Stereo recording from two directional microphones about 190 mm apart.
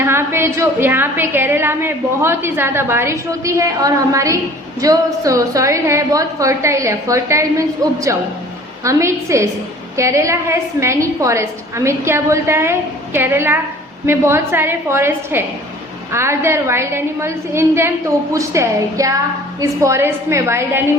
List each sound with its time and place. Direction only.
0.0 s a woman's voice: 10° right (ahead or behind)
8.8 s a woman's voice: 15° right (ahead or behind)